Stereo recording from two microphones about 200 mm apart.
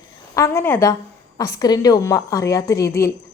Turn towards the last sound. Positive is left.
turn(degrees=15)  # may be behind; listen again after turning